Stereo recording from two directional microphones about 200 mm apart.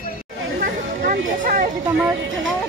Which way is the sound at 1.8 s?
10° right (ahead or behind).